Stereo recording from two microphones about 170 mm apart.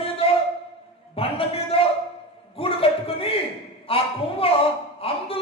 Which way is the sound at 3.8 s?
35° left (ahead or behind).